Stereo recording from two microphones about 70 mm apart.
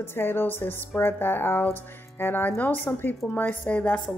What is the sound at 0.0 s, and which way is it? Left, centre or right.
A woman's voice, left.